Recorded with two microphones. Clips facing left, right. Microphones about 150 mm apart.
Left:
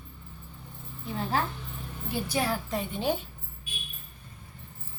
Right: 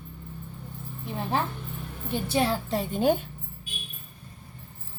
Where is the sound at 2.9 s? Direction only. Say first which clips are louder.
Right 7 dB; 50° right (ahead or behind).